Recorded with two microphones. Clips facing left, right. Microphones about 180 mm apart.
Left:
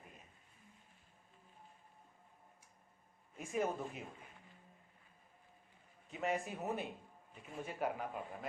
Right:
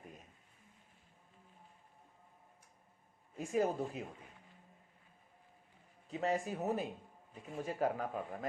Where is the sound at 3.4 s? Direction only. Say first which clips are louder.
Right 4 dB; 35° right (ahead or behind).